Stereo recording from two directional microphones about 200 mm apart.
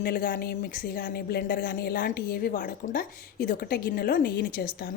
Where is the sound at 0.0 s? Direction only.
50° left (ahead or behind).